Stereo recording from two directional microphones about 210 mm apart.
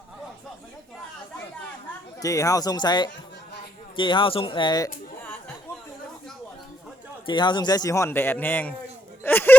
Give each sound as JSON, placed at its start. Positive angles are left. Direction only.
{"t": 2.2, "sound": "speech", "side_deg": 15}
{"t": 7.3, "sound": "a man's voice", "side_deg": 20}
{"t": 9.2, "sound": "a sound", "side_deg": 10}